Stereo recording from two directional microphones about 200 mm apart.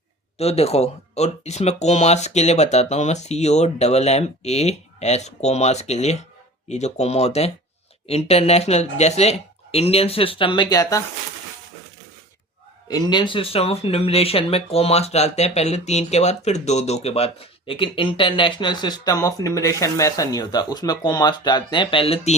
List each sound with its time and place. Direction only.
0.3 s speech: 30° left (ahead or behind)
12.9 s speech: 20° left (ahead or behind)